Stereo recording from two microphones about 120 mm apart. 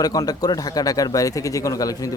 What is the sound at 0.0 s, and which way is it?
A man's voice, 30° left (ahead or behind).